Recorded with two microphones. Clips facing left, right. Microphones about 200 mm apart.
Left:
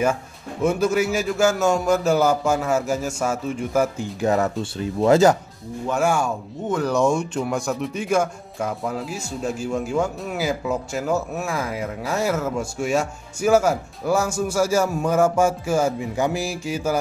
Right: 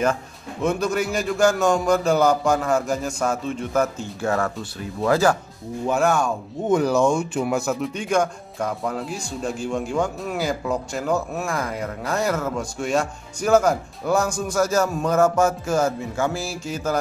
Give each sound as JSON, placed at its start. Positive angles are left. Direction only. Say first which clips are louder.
{"t": 0.0, "sound": "speech", "louder": "left 1 dB", "side_deg": 10}
{"t": 5.9, "sound": "speech", "louder": "even", "side_deg": 10}
{"t": 6.7, "sound": "speech", "louder": "right 3 dB", "side_deg": -10}
{"t": 7.0, "sound": "speech", "louder": "even", "side_deg": 0}